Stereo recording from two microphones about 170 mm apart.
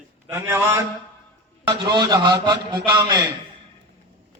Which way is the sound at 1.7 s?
25° right (ahead or behind).